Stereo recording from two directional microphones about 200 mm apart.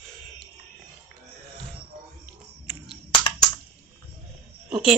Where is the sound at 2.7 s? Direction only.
20° left (ahead or behind).